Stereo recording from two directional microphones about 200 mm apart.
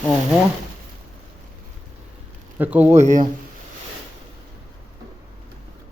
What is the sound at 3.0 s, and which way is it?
Speech, 35° right (ahead or behind).